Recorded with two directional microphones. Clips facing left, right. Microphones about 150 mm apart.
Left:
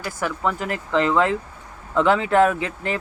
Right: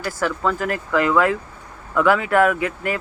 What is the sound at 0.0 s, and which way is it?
Speech, 20° left (ahead or behind).